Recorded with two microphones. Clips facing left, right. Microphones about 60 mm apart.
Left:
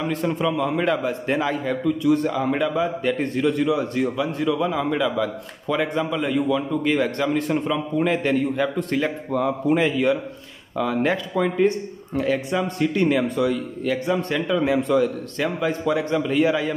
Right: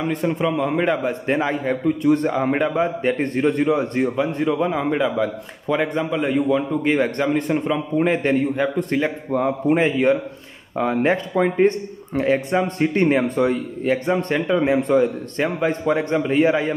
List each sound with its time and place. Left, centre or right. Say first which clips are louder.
0.1 s a man's voice: right 2 dB; centre